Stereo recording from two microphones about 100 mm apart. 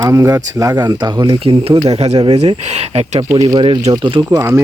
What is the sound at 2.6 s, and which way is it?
Speech, 90° right.